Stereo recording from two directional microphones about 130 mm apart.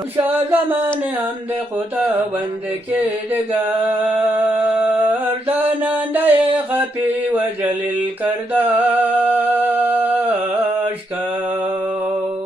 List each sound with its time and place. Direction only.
0.2 s mantra: 15° right (ahead or behind)
2.9 s mantra: 15° right (ahead or behind)
4.0 s music: 15° right (ahead or behind)
6.4 s mantra: 15° right (ahead or behind)
8.2 s music: 15° right (ahead or behind)